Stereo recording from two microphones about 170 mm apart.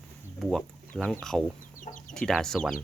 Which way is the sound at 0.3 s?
Centre (ahead or behind).